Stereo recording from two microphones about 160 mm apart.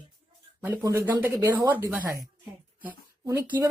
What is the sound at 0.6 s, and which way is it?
Speech, 15° right (ahead or behind).